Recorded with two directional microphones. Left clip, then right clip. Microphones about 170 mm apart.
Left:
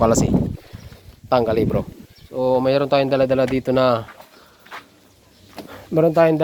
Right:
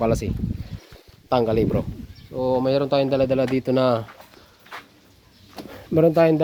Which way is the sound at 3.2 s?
5° right (ahead or behind).